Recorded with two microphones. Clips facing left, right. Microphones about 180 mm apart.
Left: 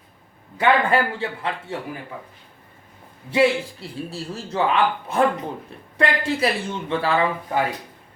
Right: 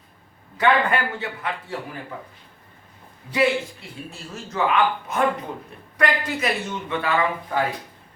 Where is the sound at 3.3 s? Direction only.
30° left (ahead or behind).